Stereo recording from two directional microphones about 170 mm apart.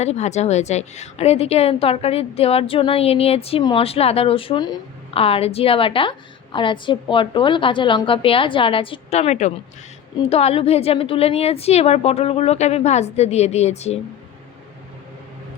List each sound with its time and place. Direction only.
0.0 s a woman's voice: 40° left (ahead or behind)